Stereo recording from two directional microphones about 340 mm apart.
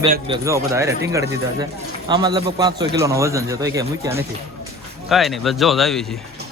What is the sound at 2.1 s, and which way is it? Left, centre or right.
A man's voice, centre.